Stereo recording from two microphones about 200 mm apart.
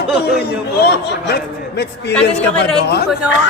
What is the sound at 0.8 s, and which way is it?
A man's voice, 55° left (ahead or behind).